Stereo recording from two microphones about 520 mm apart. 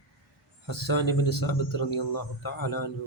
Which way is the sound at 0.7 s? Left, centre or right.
Left.